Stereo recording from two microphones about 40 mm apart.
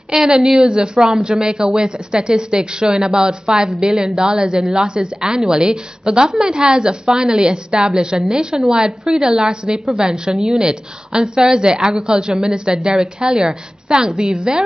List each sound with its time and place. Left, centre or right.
0.1 s a woman's voice: centre
9.2 s a woman's voice: right